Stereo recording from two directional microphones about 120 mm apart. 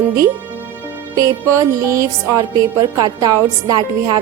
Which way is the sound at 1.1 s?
30° right (ahead or behind).